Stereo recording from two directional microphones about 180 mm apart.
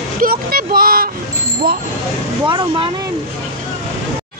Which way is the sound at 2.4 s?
25° right (ahead or behind).